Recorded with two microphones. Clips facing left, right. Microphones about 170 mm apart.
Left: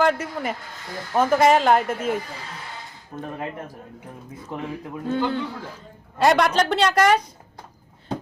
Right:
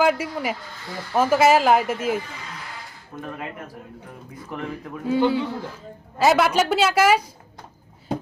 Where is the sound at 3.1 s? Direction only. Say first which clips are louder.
Left 2 dB; 35° left (ahead or behind).